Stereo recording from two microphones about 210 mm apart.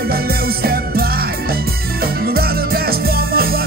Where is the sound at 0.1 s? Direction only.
45° right (ahead or behind).